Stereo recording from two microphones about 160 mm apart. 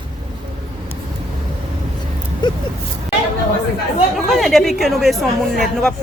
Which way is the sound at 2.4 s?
30° left (ahead or behind).